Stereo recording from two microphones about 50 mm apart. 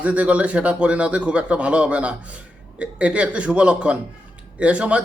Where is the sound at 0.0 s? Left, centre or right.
Right.